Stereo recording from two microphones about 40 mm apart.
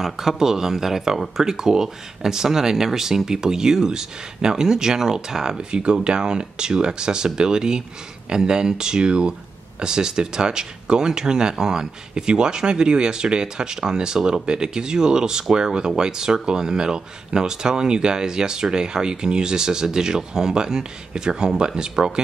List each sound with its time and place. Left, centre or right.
0.0 s speech: centre